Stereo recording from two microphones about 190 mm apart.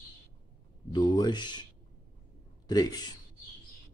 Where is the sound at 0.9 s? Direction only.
25° left (ahead or behind).